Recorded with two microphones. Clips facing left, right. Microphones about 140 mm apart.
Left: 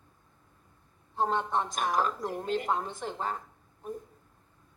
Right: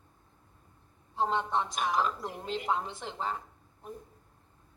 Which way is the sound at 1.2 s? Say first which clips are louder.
Left 1 dB; 45° left (ahead or behind).